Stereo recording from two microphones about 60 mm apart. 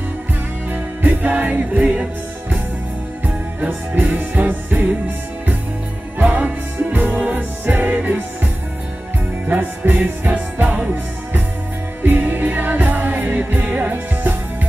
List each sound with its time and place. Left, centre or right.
1.0 s music: right
3.6 s music: right
6.1 s music: right
9.5 s music: right
12.0 s music: right